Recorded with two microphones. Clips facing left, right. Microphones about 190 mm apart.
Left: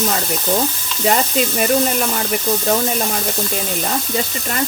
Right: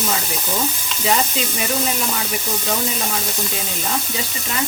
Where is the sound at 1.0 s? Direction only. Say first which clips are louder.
Left 4 dB; 50° left (ahead or behind).